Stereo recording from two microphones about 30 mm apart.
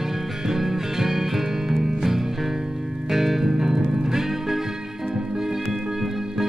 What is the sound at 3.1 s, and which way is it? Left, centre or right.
Music, centre.